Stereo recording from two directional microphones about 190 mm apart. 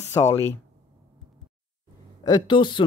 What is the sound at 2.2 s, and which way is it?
Speech, 20° left (ahead or behind).